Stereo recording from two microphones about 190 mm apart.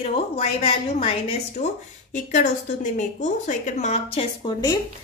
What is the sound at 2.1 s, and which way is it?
A woman's voice, 40° left (ahead or behind).